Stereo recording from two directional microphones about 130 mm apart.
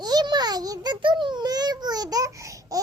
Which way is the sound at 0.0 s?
30° right (ahead or behind).